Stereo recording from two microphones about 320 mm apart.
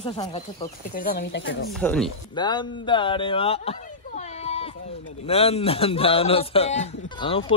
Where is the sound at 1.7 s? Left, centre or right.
Centre.